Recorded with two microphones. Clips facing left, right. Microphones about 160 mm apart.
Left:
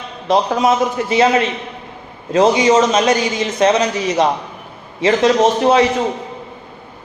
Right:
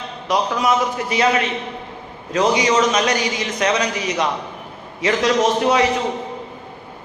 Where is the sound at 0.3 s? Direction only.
25° left (ahead or behind).